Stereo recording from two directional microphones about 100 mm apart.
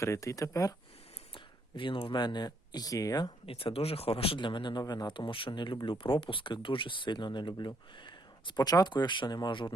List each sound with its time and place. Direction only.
0.0 s speech: 30° left (ahead or behind)
1.3 s a sound: 60° left (ahead or behind)
2.1 s speech: 45° left (ahead or behind)
3.4 s speech: 70° left (ahead or behind); by 9.7 s 55° left (ahead or behind)